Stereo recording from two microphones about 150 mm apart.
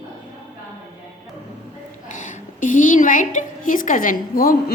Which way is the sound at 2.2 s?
60° left (ahead or behind).